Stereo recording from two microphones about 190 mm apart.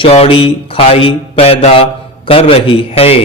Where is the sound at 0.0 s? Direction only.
30° left (ahead or behind).